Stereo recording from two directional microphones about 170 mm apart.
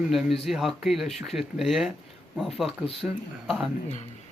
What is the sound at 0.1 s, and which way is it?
Speech, centre (ahead or behind).